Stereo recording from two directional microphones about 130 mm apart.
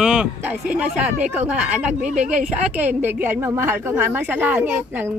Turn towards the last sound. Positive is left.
turn(degrees=-15)  # may be behind; listen again after turning